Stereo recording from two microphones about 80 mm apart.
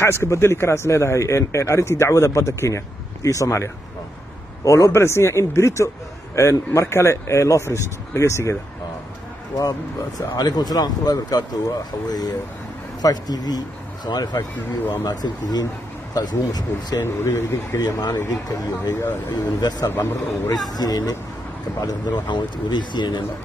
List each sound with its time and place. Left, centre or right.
0.0 s a man's voice: left
10.2 s speech: left
13.0 s speech: left
17.0 s a man's voice: left
19.9 s a man's voice: left
20.7 s speech: left